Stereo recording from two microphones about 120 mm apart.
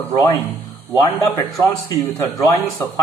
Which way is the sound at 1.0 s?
35° left (ahead or behind).